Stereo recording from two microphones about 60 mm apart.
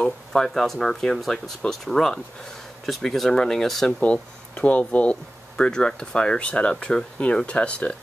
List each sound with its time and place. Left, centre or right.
0.3 s speech: centre
4.0 s speech: left